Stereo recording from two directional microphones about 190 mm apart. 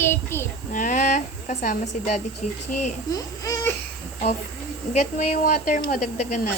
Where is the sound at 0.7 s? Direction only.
40° left (ahead or behind).